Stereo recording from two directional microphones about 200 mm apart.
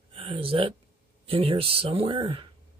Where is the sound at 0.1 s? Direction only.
30° right (ahead or behind).